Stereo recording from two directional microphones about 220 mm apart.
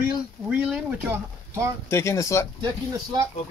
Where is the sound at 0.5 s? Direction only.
5° right (ahead or behind).